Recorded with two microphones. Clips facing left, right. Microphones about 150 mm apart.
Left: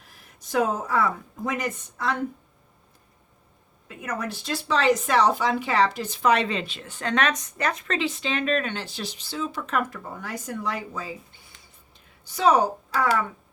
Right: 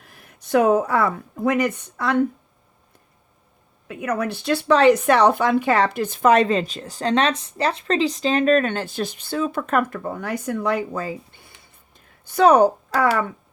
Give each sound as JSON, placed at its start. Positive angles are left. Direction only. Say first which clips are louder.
{"t": 0.1, "sound": "speech", "louder": "right 8 dB", "side_deg": -60}
{"t": 3.8, "sound": "speech", "louder": "right 7 dB", "side_deg": -65}